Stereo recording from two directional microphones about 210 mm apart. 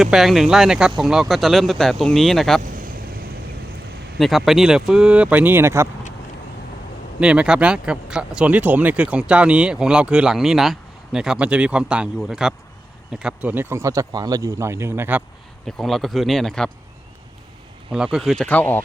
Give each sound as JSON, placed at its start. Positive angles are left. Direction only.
{"t": 0.0, "sound": "speech", "side_deg": 0}
{"t": 2.6, "sound": "vehicle", "side_deg": -40}
{"t": 4.2, "sound": "speech", "side_deg": 0}
{"t": 7.2, "sound": "a man's voice", "side_deg": -5}
{"t": 15.6, "sound": "speech", "side_deg": 0}
{"t": 17.9, "sound": "speech", "side_deg": -5}